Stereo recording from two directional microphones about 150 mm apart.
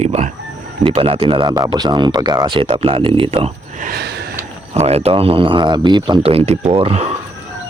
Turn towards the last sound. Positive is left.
turn(degrees=-40)  # may be behind; listen again after turning